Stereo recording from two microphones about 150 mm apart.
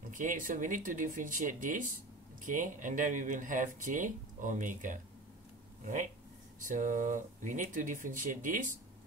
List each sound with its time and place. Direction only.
0.1 s speech: 60° right (ahead or behind)
6.6 s speech: 60° right (ahead or behind)